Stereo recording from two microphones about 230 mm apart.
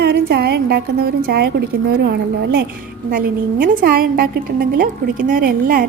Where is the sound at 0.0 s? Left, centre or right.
Right.